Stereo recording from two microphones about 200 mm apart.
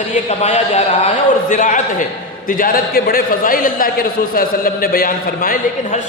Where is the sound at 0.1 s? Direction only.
35° left (ahead or behind).